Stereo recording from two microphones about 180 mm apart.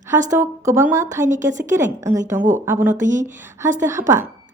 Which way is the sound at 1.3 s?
45° right (ahead or behind).